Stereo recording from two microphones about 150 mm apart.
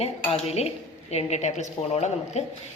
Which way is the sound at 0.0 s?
45° left (ahead or behind).